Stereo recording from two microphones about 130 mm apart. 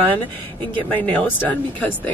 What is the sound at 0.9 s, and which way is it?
Speech, 15° left (ahead or behind).